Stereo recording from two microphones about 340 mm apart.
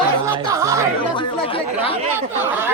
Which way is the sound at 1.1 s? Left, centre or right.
Centre.